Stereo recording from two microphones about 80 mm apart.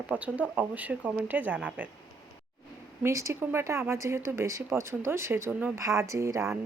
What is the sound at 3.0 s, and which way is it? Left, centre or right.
Speech, right.